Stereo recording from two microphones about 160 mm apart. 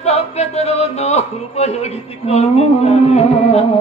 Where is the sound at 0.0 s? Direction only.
40° left (ahead or behind).